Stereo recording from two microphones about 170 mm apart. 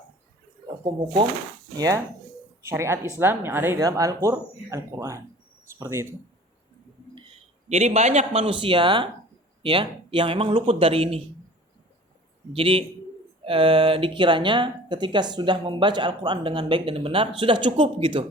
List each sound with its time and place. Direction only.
2.6 s speech: 15° right (ahead or behind)
7.7 s speech: 40° right (ahead or behind)
12.5 s speech: 30° right (ahead or behind)